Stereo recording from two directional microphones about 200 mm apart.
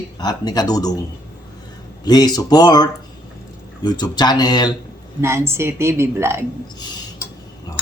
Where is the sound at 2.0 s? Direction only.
20° left (ahead or behind).